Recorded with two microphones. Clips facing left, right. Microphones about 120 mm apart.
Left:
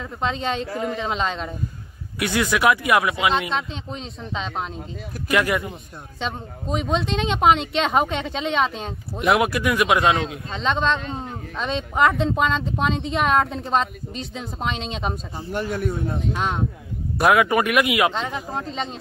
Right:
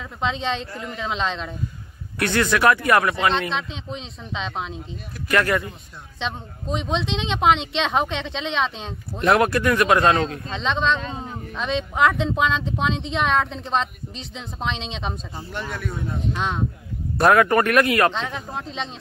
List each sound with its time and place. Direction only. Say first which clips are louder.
0.3 s speech: even; centre (ahead or behind)
0.7 s speech: left 7 dB; 60° left (ahead or behind)
0.9 s speech: left 1 dB; 5° left (ahead or behind)
15.5 s speech: left 6 dB; 55° left (ahead or behind)
16.3 s speech: left 1 dB; 5° left (ahead or behind)